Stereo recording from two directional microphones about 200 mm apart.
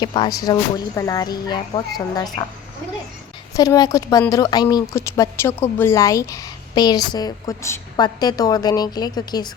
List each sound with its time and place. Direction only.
0.0 s speech: 20° left (ahead or behind)
3.5 s speech: 15° left (ahead or behind)